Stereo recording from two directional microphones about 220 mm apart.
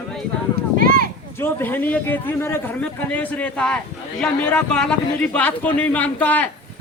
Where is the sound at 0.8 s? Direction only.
40° right (ahead or behind).